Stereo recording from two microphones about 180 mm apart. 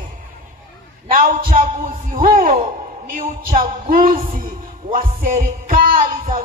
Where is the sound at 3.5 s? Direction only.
50° right (ahead or behind).